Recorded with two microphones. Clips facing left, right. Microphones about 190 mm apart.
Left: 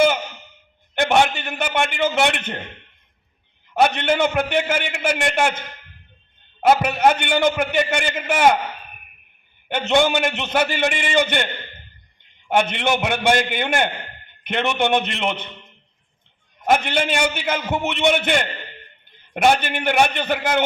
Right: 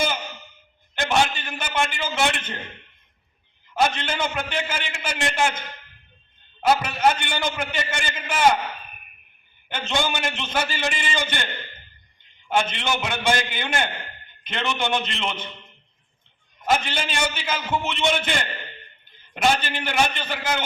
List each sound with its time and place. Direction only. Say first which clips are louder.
0.9 s a man's voice: left 5 dB; 60° left (ahead or behind)
3.8 s a man's voice: left 6 dB; 60° left (ahead or behind)
6.6 s a man's voice: left 4 dB; 60° left (ahead or behind)
9.6 s a man's voice: left 8 dB; 60° left (ahead or behind)
12.5 s a man's voice: left 5 dB; 60° left (ahead or behind)
16.6 s a man's voice: left 5 dB; 60° left (ahead or behind)